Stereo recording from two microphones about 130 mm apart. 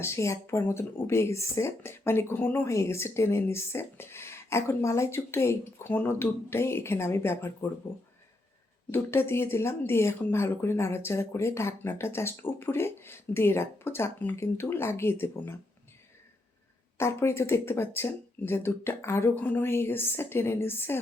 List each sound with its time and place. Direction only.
0.0 s speech: 20° left (ahead or behind)
8.9 s speech: 20° left (ahead or behind)
17.0 s speech: 20° left (ahead or behind)